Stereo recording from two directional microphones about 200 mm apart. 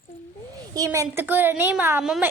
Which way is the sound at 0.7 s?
15° right (ahead or behind).